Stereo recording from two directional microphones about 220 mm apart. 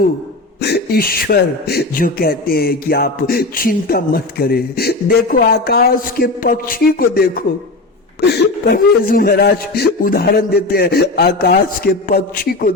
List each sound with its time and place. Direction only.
0.6 s speech: 45° left (ahead or behind)